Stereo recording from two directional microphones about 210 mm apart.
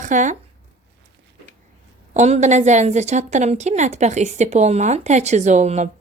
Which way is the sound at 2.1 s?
35° right (ahead or behind).